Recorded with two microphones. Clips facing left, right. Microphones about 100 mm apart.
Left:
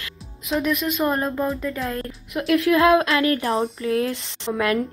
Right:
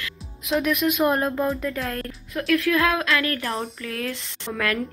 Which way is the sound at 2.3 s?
25° left (ahead or behind).